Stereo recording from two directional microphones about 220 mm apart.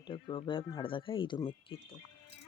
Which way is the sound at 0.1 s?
20° left (ahead or behind).